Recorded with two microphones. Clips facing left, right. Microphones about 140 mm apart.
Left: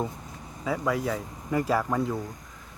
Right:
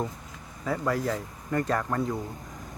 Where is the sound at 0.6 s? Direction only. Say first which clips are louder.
Even; centre (ahead or behind).